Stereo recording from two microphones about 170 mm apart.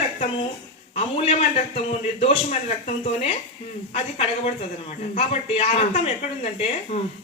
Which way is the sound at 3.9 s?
40° left (ahead or behind).